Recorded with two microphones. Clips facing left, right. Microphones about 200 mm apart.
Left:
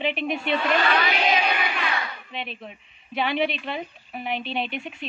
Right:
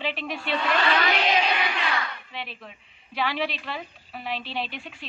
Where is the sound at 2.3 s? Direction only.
20° left (ahead or behind).